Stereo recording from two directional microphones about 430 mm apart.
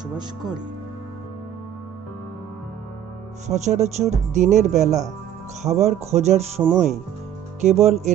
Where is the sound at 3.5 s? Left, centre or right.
Centre.